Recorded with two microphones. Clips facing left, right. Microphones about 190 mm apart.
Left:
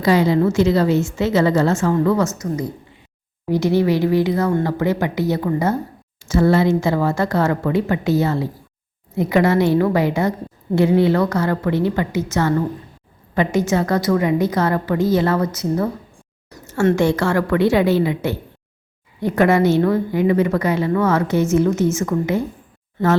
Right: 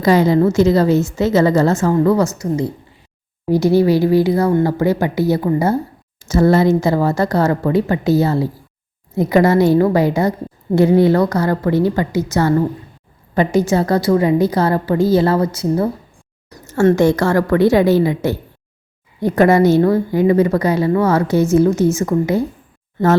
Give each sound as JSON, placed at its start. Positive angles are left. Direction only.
{"t": 0.0, "sound": "a woman's voice", "side_deg": -45}
{"t": 6.2, "sound": "a woman's voice", "side_deg": -40}
{"t": 16.6, "sound": "a woman's voice", "side_deg": -40}